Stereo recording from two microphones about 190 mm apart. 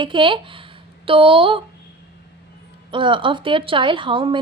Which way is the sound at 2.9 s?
25° right (ahead or behind).